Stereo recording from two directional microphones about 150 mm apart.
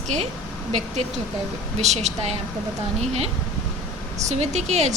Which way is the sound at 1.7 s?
50° right (ahead or behind).